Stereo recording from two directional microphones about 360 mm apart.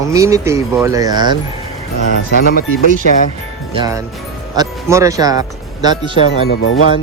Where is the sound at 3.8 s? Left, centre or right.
Centre.